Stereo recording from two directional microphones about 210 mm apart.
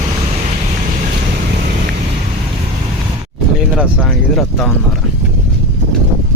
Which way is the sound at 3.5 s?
Centre (ahead or behind).